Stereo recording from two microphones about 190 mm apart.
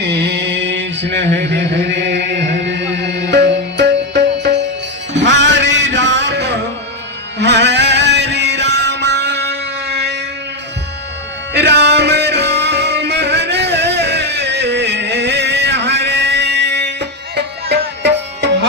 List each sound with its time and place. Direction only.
0.0 s mantra: 60° right (ahead or behind)
1.4 s chant: 65° right (ahead or behind)
5.1 s music: 70° right (ahead or behind)
11.5 s music: 65° right (ahead or behind)